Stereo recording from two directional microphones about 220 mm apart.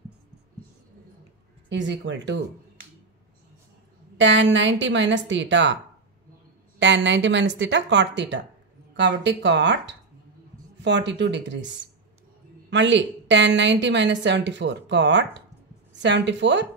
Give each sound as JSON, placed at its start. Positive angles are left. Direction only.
{"t": 1.7, "sound": "a woman's voice", "side_deg": -55}
{"t": 4.2, "sound": "speech", "side_deg": -55}
{"t": 6.8, "sound": "a woman's voice", "side_deg": -55}